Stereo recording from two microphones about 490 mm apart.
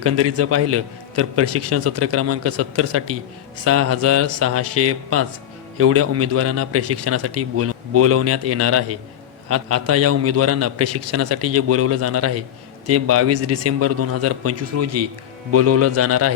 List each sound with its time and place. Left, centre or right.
0.0 s a man's voice: right